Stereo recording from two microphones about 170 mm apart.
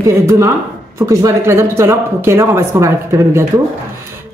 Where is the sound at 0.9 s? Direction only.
20° right (ahead or behind).